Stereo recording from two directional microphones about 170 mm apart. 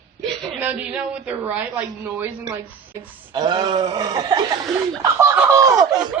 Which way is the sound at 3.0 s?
25° right (ahead or behind).